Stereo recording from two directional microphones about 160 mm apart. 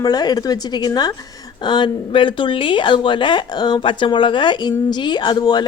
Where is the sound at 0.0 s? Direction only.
25° left (ahead or behind).